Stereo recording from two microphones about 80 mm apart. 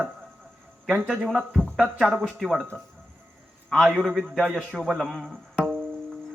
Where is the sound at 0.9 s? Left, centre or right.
Centre.